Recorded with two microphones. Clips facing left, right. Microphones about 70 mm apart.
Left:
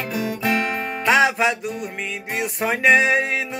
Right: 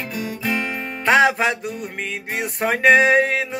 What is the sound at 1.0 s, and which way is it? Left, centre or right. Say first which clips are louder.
Music: right 2 dB; right.